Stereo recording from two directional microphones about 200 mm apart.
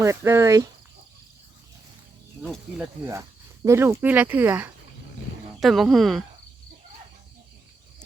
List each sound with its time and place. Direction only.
0.0 s speech: 15° right (ahead or behind)
2.4 s speech: 5° right (ahead or behind)